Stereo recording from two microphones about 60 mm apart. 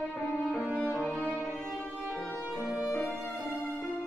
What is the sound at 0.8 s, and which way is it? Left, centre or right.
Music, left.